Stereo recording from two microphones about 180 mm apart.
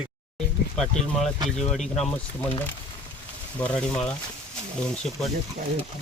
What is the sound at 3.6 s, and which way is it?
Speech, 5° left (ahead or behind).